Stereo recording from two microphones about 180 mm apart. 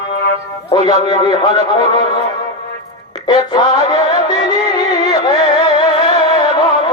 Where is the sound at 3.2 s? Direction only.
25° left (ahead or behind).